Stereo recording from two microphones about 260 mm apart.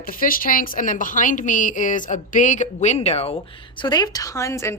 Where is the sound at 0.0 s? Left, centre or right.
Left.